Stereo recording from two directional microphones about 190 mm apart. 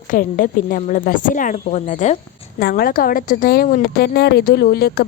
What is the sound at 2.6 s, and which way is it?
A woman's voice, 55° left (ahead or behind).